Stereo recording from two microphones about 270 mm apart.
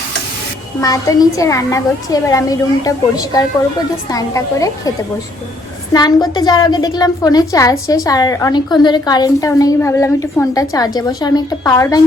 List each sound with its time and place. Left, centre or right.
0.8 s a woman's voice: centre
5.9 s a woman's voice: centre